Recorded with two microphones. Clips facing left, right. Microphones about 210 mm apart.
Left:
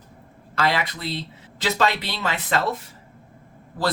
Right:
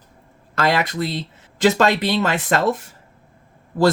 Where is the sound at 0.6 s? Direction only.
45° right (ahead or behind).